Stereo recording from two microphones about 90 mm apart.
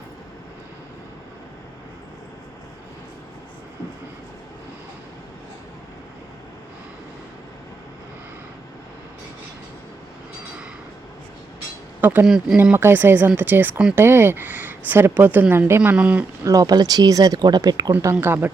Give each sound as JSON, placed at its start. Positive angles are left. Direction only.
{"t": 11.9, "sound": "a sound", "side_deg": -20}
{"t": 12.2, "sound": "speech", "side_deg": -5}
{"t": 12.7, "sound": "speech", "side_deg": -25}
{"t": 16.4, "sound": "speech", "side_deg": -40}
{"t": 18.0, "sound": "speech", "side_deg": -25}